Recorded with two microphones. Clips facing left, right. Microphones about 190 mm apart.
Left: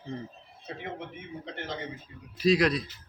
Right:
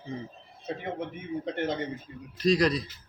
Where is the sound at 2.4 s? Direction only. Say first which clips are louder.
Even; 5° left (ahead or behind).